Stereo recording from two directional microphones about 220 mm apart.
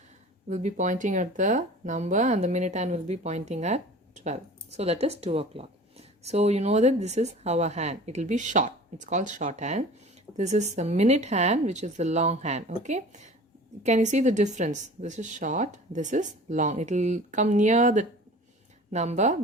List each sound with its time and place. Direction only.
0.4 s a woman's voice: 35° right (ahead or behind)